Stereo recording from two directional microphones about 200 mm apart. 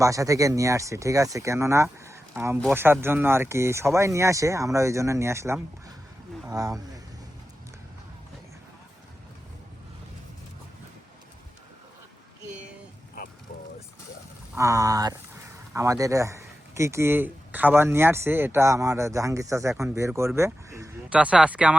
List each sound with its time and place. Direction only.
0.0 s speech: 15° right (ahead or behind)
14.5 s speech: 15° right (ahead or behind)